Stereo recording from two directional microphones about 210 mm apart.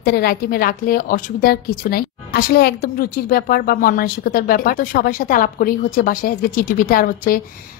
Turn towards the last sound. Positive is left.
turn(degrees=40)  # may be behind; listen again after turning